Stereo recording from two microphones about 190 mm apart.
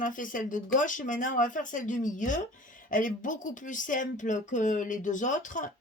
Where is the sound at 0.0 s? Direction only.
45° left (ahead or behind).